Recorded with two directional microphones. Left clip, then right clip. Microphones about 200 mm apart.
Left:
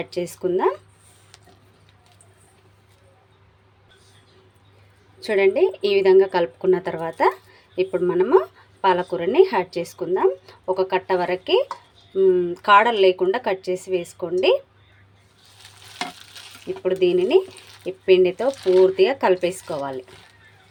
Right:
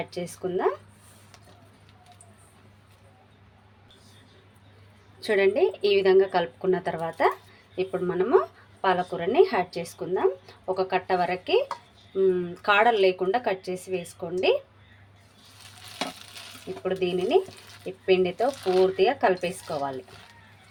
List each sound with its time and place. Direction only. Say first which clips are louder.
0.0 s speech: left 7 dB; 30° left (ahead or behind)
5.2 s speech: left 4 dB; 15° left (ahead or behind)
16.8 s speech: left 8 dB; 30° left (ahead or behind)